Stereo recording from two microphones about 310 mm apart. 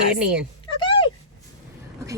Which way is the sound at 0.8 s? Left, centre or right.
Centre.